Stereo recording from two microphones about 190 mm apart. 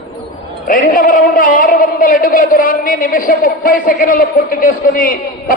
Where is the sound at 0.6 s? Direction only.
45° left (ahead or behind).